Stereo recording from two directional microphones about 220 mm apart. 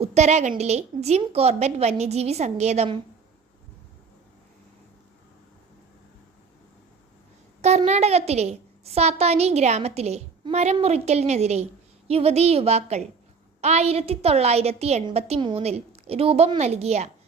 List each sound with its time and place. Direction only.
0.0 s a woman's voice: 30° right (ahead or behind)
7.6 s a woman's voice: 30° right (ahead or behind)